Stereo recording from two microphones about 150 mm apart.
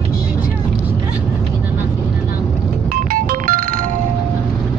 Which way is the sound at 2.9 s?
70° right (ahead or behind).